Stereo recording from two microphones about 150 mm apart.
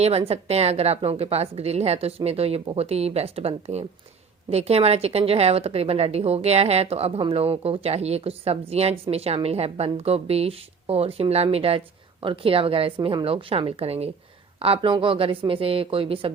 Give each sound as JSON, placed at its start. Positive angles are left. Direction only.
{"t": 0.0, "sound": "a woman's voice", "side_deg": -45}